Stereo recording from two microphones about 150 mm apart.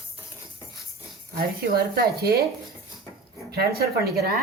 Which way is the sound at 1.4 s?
85° right.